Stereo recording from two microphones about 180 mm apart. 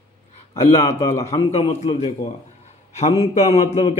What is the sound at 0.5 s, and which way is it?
A man's voice, 35° left (ahead or behind).